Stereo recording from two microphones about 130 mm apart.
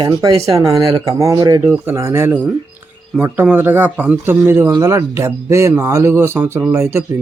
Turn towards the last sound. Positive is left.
turn(degrees=-20)  # may be behind; listen again after turning